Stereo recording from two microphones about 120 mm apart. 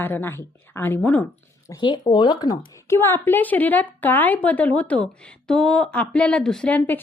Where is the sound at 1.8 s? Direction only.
40° left (ahead or behind).